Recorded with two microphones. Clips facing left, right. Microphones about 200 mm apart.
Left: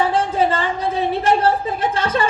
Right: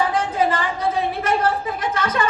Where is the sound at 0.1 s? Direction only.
30° left (ahead or behind).